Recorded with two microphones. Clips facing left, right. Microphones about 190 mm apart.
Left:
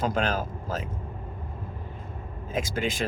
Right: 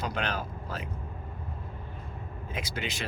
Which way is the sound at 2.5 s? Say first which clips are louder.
Left 8 dB; 45° left (ahead or behind).